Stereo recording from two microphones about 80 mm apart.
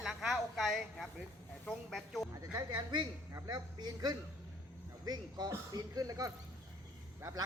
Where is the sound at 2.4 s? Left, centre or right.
Right.